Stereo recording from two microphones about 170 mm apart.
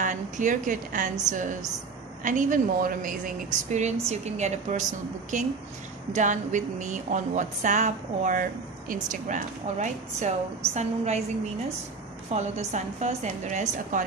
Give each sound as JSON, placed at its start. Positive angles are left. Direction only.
{"t": 0.0, "sound": "speech", "side_deg": -50}
{"t": 3.7, "sound": "speech", "side_deg": -40}
{"t": 12.3, "sound": "speech", "side_deg": -40}